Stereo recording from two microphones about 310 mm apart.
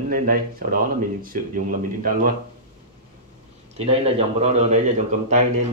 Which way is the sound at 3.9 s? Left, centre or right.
Centre.